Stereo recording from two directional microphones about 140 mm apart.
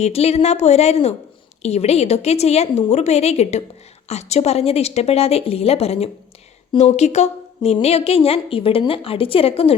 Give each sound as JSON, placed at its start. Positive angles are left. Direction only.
{"t": 0.0, "sound": "a woman's voice", "side_deg": 50}